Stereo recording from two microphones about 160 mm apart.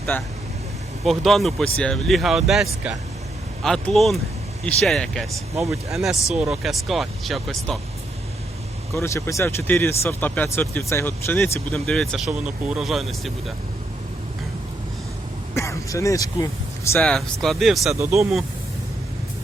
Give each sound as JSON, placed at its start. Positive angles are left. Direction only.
{"t": 0.1, "sound": "speech", "side_deg": 15}
{"t": 1.0, "sound": "speech", "side_deg": 0}
{"t": 9.0, "sound": "speech", "side_deg": 15}
{"t": 11.7, "sound": "speech", "side_deg": 5}
{"t": 15.5, "sound": "speech", "side_deg": 20}
{"t": 17.0, "sound": "speech", "side_deg": 0}